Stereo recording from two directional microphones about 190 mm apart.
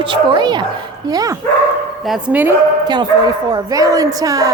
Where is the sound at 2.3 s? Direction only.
10° right (ahead or behind).